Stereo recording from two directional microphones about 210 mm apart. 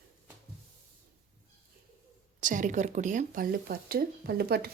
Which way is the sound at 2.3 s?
40° right (ahead or behind).